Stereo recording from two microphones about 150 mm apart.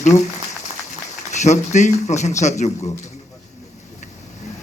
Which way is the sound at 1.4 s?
50° left (ahead or behind).